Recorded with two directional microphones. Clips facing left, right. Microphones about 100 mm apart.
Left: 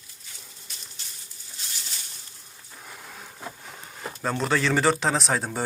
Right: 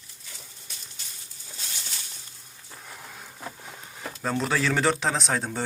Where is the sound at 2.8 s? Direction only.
Centre (ahead or behind).